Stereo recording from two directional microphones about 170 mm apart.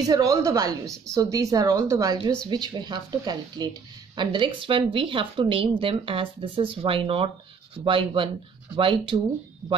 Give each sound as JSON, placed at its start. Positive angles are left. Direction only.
{"t": 0.0, "sound": "a woman's voice", "side_deg": -20}
{"t": 9.6, "sound": "a woman's voice", "side_deg": -20}